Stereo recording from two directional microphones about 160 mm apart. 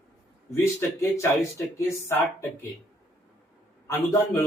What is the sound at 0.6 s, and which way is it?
Speech, 15° left (ahead or behind).